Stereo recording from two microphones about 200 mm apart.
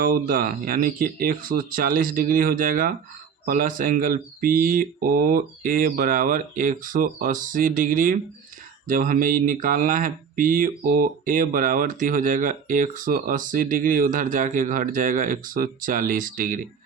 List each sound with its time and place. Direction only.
0.0 s speech: 45° right (ahead or behind)